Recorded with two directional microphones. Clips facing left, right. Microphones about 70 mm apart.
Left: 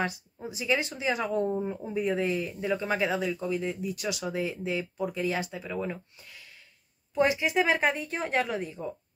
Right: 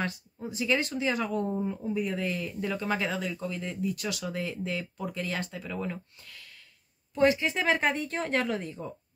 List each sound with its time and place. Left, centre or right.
0.0 s speech: centre
4.4 s speech: centre